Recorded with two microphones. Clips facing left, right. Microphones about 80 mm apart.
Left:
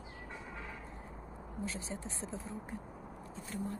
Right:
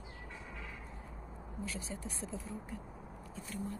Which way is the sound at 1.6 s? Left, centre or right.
Left.